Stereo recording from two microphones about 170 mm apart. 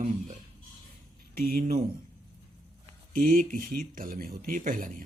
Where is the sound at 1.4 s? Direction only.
55° right (ahead or behind).